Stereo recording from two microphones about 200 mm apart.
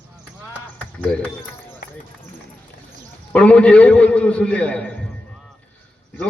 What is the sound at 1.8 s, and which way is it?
Run, 45° left (ahead or behind).